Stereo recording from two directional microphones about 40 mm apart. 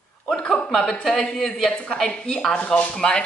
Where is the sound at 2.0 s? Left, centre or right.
Centre.